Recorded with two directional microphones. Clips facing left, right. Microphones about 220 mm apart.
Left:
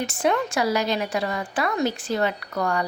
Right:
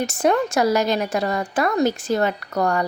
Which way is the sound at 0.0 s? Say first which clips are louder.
Right 4 dB; 45° right (ahead or behind).